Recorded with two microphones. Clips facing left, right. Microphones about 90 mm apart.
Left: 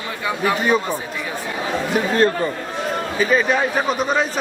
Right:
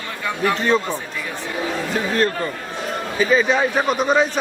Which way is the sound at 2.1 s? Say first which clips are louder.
Left 3 dB; 25° left (ahead or behind).